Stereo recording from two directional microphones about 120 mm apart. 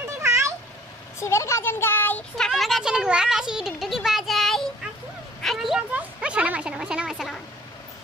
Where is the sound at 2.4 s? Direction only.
Centre (ahead or behind).